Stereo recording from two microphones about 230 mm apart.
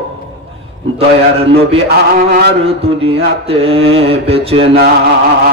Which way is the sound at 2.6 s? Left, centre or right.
Right.